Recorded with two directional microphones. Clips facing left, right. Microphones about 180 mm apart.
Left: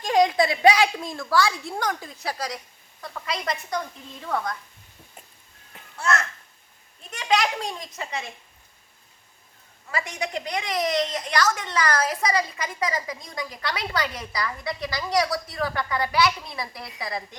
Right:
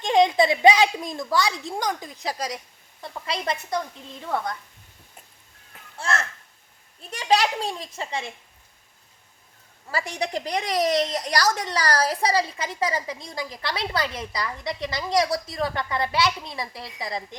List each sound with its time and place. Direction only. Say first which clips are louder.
0.0 s a woman's voice: right 1 dB; 25° right (ahead or behind)
3.0 s speech: right 1 dB; 30° right (ahead or behind)
6.0 s a woman's voice: left 2 dB; 30° right (ahead or behind)
9.9 s a woman's voice: right 2 dB; 35° right (ahead or behind)